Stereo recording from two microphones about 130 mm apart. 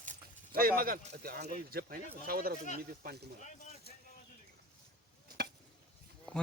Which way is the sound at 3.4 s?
70° left (ahead or behind).